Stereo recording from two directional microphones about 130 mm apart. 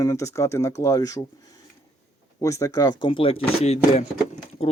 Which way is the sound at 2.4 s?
25° left (ahead or behind).